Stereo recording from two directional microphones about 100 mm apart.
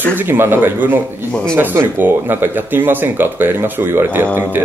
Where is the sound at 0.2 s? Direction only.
25° right (ahead or behind).